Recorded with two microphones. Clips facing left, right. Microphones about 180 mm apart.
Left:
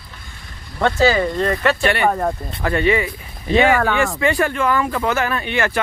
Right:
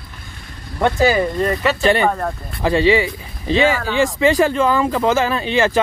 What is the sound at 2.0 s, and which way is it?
Speech, 10° left (ahead or behind).